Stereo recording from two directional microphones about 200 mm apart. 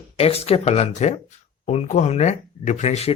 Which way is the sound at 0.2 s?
30° left (ahead or behind).